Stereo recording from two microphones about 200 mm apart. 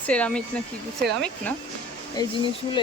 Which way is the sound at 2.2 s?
20° left (ahead or behind).